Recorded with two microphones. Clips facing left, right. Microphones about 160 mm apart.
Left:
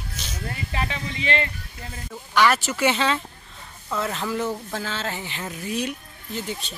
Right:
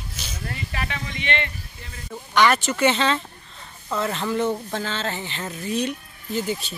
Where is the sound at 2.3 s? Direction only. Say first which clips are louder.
Right 1 dB; 5° left (ahead or behind).